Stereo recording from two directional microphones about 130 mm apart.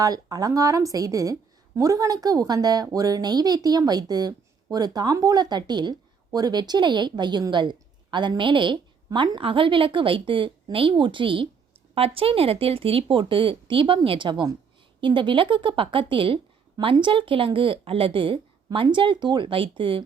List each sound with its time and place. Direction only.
0.0 s a woman's voice: 30° right (ahead or behind)